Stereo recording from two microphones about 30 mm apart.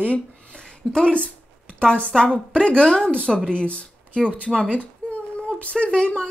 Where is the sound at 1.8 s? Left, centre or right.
Left.